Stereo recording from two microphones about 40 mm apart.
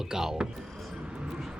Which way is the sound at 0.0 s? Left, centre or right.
Centre.